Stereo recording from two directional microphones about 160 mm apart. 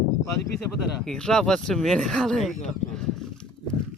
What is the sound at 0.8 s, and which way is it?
Speech, 5° left (ahead or behind).